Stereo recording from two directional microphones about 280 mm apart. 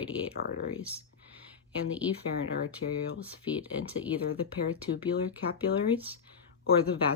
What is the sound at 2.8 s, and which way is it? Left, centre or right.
Speech, left.